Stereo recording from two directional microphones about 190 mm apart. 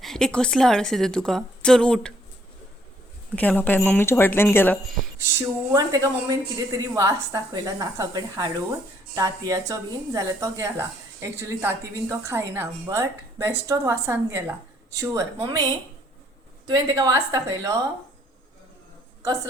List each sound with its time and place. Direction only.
0.0 s a woman's voice: 5° left (ahead or behind)
3.3 s speech: 10° left (ahead or behind)
5.3 s a woman's voice: 15° right (ahead or behind)
16.6 s a woman's voice: 20° right (ahead or behind)